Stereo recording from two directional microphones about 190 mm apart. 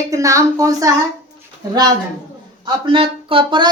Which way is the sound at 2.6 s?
25° right (ahead or behind).